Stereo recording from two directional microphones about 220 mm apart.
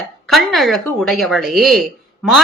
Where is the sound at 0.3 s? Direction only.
Centre (ahead or behind).